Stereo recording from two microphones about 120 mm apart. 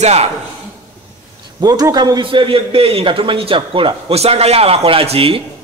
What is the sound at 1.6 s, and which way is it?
A man's voice, 30° right (ahead or behind).